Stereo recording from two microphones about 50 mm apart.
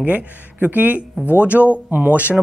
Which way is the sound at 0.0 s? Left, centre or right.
Right.